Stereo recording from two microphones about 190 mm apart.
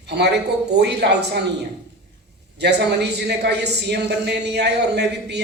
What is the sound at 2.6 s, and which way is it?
Speech, 60° right (ahead or behind).